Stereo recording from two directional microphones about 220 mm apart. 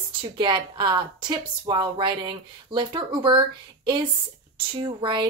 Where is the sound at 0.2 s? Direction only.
20° right (ahead or behind).